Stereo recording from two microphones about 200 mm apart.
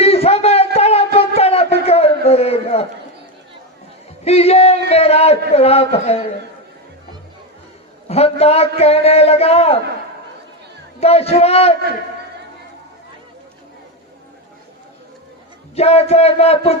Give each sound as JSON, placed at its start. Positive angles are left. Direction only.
{"t": 0.0, "sound": "a sound", "side_deg": 30}
{"t": 4.2, "sound": "a man's voice", "side_deg": 30}
{"t": 8.0, "sound": "a man's voice", "side_deg": 30}
{"t": 11.0, "sound": "a man's voice", "side_deg": 30}
{"t": 15.7, "sound": "a man's voice", "side_deg": 30}